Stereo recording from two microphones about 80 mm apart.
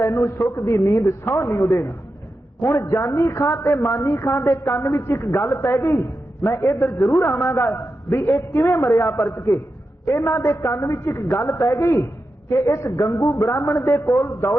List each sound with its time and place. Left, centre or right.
0.0 s a woman's voice: left